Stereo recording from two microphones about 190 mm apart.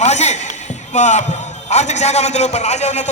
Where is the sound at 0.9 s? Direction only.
35° left (ahead or behind).